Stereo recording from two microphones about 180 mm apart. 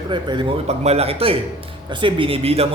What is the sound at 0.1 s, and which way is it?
A man's voice, 25° right (ahead or behind).